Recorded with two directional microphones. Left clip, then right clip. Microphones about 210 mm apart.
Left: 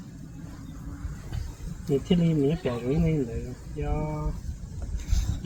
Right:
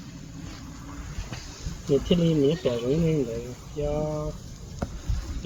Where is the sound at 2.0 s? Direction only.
15° left (ahead or behind).